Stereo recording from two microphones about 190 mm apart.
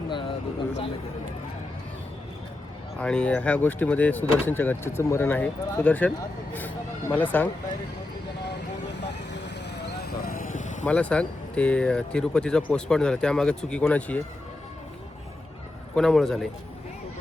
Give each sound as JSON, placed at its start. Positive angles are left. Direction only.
{"t": 0.1, "sound": "vehicle", "side_deg": 25}
{"t": 3.0, "sound": "speech", "side_deg": 5}
{"t": 9.0, "sound": "vehicle", "side_deg": 65}
{"t": 10.8, "sound": "speech", "side_deg": 5}
{"t": 16.0, "sound": "speech", "side_deg": 0}